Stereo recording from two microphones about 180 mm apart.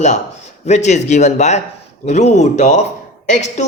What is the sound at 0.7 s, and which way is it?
Speech, 40° left (ahead or behind).